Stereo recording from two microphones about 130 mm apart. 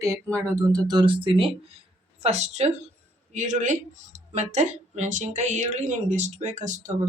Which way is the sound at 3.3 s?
70° right (ahead or behind).